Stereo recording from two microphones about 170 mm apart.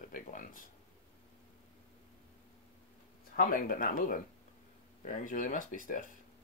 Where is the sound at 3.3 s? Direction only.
60° left (ahead or behind).